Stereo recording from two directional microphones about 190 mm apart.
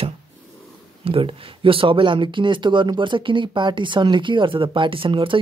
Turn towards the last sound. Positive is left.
turn(degrees=-25)  # may be behind; listen again after turning